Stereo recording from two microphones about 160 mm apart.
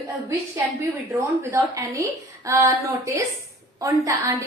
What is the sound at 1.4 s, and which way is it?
A woman's voice, 20° right (ahead or behind).